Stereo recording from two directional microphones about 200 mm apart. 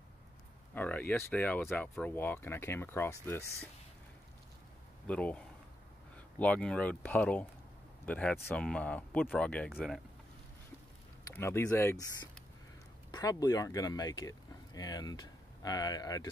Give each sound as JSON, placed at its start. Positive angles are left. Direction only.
{"t": 0.7, "sound": "speech", "side_deg": 10}
{"t": 5.0, "sound": "speech", "side_deg": 5}
{"t": 11.2, "sound": "speech", "side_deg": 10}